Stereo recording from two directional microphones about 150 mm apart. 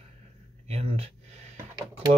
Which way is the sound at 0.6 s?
45° right (ahead or behind).